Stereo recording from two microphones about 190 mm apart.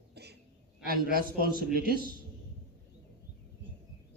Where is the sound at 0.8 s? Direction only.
50° right (ahead or behind).